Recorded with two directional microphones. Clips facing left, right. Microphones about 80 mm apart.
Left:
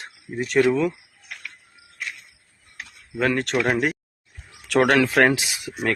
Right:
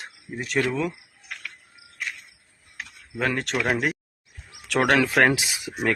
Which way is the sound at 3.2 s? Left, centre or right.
Centre.